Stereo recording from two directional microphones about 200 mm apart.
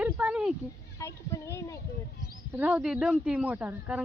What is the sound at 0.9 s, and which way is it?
Speech, 15° left (ahead or behind).